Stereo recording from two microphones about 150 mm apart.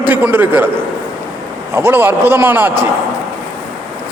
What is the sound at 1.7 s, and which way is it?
A man's voice, 15° right (ahead or behind).